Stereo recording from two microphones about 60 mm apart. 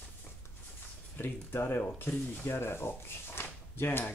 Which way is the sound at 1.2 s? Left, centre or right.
Left.